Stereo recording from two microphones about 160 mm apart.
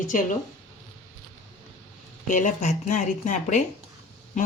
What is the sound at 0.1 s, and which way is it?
Speech, 55° left (ahead or behind).